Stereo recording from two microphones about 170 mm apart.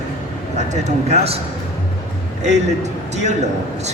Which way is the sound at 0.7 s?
40° right (ahead or behind).